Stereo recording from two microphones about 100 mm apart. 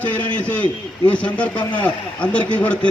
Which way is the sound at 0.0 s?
15° left (ahead or behind).